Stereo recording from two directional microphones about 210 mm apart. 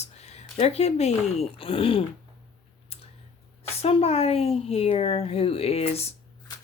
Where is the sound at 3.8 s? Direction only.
30° left (ahead or behind).